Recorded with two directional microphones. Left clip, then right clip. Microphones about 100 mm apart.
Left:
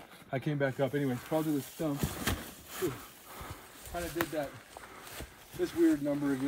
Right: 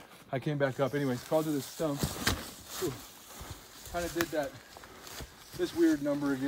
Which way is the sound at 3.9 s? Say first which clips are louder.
Right 2 dB; 10° right (ahead or behind).